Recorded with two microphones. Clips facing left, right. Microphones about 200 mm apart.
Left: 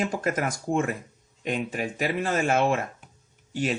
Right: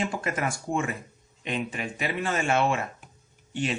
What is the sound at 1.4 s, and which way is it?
A man's voice, 40° left (ahead or behind).